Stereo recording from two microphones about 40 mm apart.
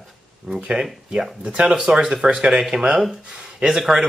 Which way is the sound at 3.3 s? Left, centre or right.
Centre.